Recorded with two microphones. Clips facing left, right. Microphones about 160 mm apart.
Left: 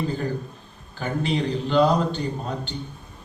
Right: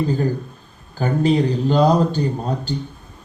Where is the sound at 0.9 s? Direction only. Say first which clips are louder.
Right 7 dB; 40° right (ahead or behind).